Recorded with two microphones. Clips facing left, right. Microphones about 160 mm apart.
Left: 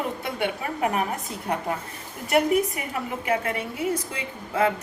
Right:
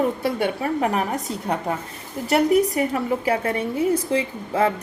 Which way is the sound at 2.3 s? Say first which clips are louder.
Right 3 dB; 35° right (ahead or behind).